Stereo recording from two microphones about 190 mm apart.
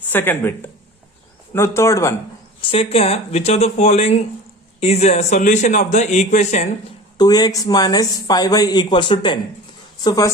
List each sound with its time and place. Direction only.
0.1 s speech: 10° left (ahead or behind)
2.6 s speech: 30° left (ahead or behind)
7.2 s speech: 20° left (ahead or behind)